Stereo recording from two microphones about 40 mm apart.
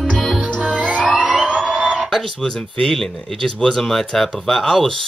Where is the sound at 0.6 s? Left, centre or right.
Right.